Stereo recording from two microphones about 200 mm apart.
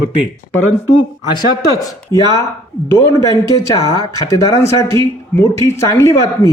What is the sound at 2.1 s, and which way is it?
A man's voice, 15° left (ahead or behind).